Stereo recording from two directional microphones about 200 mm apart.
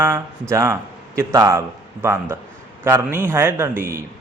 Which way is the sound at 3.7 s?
45° right (ahead or behind).